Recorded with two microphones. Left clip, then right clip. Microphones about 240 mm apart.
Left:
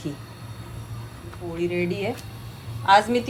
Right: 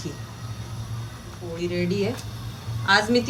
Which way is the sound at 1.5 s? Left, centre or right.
Left.